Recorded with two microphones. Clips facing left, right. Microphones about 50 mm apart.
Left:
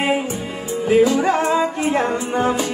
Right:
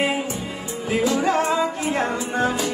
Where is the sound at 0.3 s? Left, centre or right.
Left.